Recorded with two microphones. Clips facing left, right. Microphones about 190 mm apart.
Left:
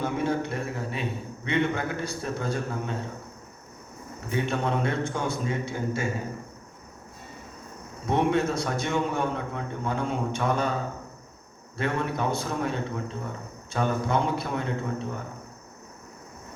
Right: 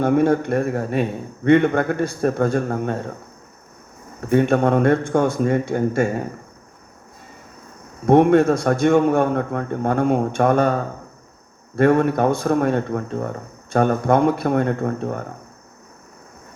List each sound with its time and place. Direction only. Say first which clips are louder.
0.0 s a man's voice: right 10 dB; 55° right (ahead or behind)
4.3 s a man's voice: right 11 dB; 55° right (ahead or behind)
8.0 s a man's voice: right 11 dB; 55° right (ahead or behind)